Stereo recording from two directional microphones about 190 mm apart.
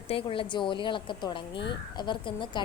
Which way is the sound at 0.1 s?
30° left (ahead or behind).